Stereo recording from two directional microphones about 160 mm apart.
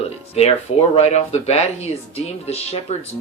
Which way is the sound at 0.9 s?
40° left (ahead or behind).